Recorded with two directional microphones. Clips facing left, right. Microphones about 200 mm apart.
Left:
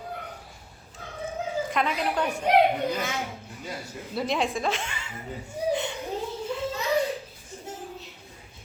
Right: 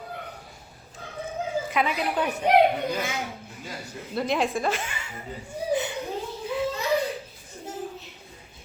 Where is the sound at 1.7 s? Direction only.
5° right (ahead or behind).